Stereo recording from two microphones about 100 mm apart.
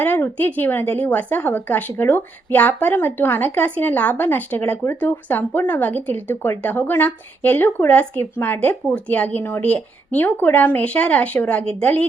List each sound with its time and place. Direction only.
0.0 s speech: 20° left (ahead or behind)